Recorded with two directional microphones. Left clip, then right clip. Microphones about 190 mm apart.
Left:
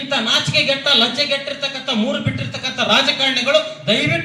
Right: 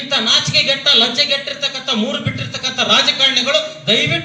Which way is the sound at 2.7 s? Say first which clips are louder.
Right 2 dB; 15° right (ahead or behind).